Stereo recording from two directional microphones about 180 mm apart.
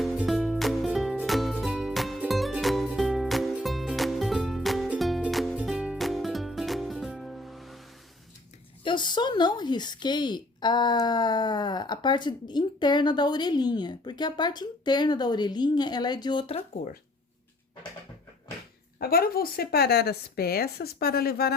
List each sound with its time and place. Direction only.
0.0 s music: centre (ahead or behind)
8.8 s speech: 25° left (ahead or behind)
18.9 s speech: 55° left (ahead or behind)